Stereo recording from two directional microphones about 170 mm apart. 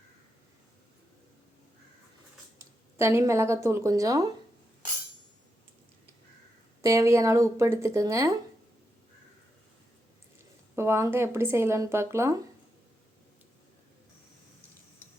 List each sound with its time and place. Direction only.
2.6 s speech: 15° right (ahead or behind)
6.8 s speech: 15° right (ahead or behind)
10.8 s speech: 15° right (ahead or behind)